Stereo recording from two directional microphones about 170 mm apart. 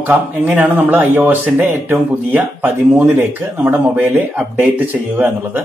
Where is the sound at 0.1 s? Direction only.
10° right (ahead or behind).